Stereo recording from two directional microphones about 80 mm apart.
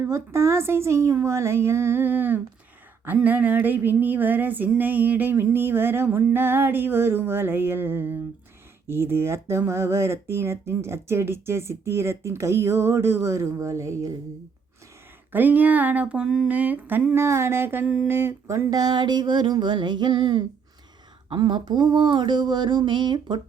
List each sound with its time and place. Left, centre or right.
0.0 s speech: right
3.2 s music: right
8.9 s speech: right
15.3 s music: right
16.5 s music: centre
17.2 s speech: right
18.7 s a sound: right